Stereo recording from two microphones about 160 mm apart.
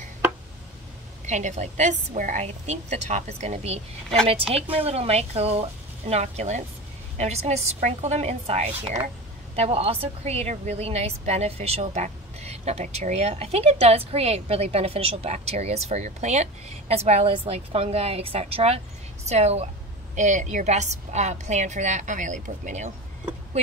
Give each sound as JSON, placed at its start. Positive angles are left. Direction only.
{"t": 1.2, "sound": "a woman's voice", "side_deg": -45}